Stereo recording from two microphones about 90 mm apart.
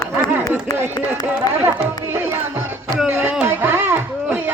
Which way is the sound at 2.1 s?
25° right (ahead or behind).